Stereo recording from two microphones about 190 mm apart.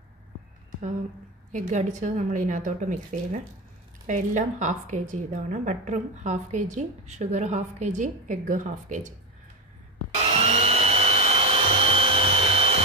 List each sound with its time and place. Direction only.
1.5 s a woman's voice: 40° right (ahead or behind)
10.2 s vacuum cleaner: 35° right (ahead or behind)